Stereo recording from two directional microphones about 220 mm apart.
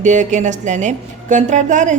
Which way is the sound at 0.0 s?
35° right (ahead or behind).